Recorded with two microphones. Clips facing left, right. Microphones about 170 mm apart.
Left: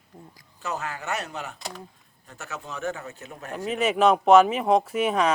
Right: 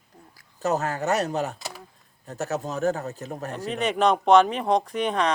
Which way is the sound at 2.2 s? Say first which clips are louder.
Right 10 dB; 40° right (ahead or behind).